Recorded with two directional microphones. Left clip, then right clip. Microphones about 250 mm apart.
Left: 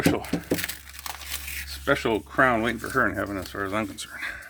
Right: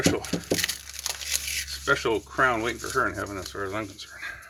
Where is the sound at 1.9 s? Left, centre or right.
Left.